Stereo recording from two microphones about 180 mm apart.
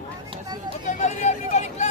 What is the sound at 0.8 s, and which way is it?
Speech, 40° left (ahead or behind).